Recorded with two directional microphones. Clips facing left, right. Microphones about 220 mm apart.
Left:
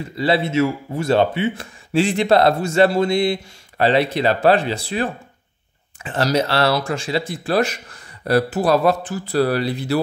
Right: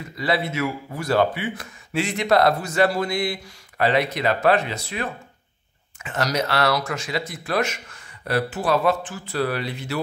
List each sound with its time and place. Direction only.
0.0 s speech: 30° left (ahead or behind)